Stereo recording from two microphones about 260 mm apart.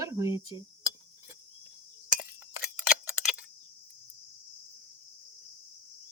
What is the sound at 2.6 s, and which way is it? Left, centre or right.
Clock, centre.